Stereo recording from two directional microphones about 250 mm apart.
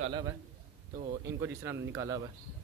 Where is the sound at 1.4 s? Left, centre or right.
Centre.